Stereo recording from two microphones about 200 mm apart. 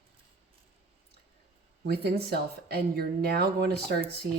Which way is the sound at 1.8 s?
55° right (ahead or behind).